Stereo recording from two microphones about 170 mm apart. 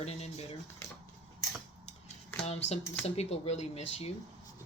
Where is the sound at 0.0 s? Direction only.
40° left (ahead or behind).